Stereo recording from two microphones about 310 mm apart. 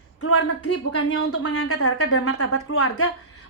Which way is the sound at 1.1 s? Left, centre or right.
Left.